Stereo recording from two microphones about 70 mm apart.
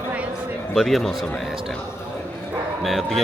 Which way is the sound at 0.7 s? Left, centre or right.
Centre.